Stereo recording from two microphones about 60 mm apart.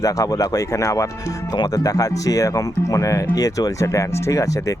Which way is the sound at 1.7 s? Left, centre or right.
Left.